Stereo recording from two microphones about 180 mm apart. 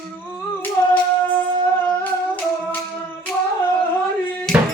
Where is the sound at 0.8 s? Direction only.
15° left (ahead or behind).